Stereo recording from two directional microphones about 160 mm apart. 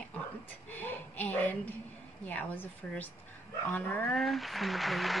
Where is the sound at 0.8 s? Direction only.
10° left (ahead or behind).